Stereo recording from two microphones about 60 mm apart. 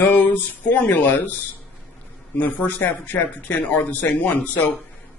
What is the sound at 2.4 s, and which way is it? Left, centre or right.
A man's voice, left.